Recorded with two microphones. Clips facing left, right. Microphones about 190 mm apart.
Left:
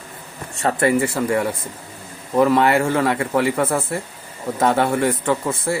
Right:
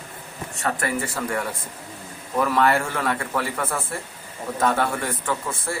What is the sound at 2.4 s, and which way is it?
A man's voice, 25° left (ahead or behind).